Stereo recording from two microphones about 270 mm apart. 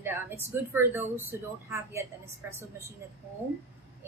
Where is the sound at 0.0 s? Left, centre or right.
Centre.